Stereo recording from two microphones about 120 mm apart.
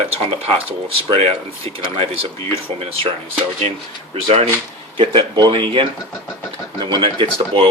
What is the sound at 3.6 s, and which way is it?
Speech, 55° right (ahead or behind).